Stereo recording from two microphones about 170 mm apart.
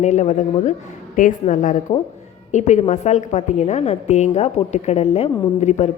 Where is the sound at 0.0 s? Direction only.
45° left (ahead or behind).